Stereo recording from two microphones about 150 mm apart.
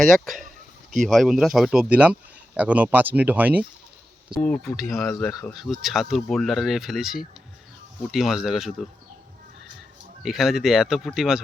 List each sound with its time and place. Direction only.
0.0 s speech: centre (ahead or behind)
0.4 s a sound: 55° right (ahead or behind)
1.0 s speech: centre (ahead or behind)
4.4 s speech: 5° left (ahead or behind)
10.2 s speech: 5° right (ahead or behind)